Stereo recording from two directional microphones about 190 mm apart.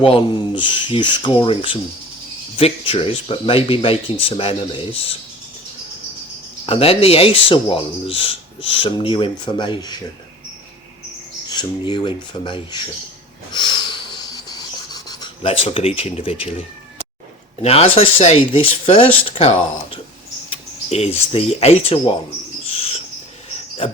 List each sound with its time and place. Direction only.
0.0 s speech: 30° left (ahead or behind)
6.7 s speech: 30° left (ahead or behind)
11.4 s speech: 25° left (ahead or behind)
13.5 s writing: 25° left (ahead or behind)
17.6 s speech: 30° left (ahead or behind)
21.3 s speech: 35° left (ahead or behind)
22.7 s dog: 30° left (ahead or behind)